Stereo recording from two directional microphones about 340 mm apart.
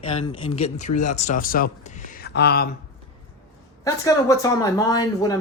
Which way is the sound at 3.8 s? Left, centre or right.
Centre.